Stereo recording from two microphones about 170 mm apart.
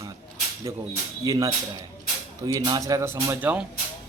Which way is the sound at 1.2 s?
20° right (ahead or behind).